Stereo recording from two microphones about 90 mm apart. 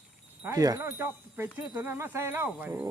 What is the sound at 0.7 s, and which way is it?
Speech, 25° right (ahead or behind).